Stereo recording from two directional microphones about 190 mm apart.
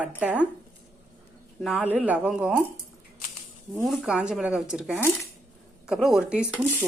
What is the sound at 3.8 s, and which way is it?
Speech, centre (ahead or behind).